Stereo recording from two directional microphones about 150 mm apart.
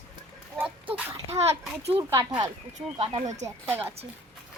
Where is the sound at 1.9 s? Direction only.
20° right (ahead or behind).